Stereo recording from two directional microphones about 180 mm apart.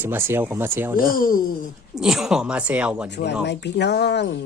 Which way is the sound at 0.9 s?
50° left (ahead or behind).